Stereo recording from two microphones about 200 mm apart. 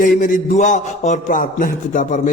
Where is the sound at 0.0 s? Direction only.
40° left (ahead or behind).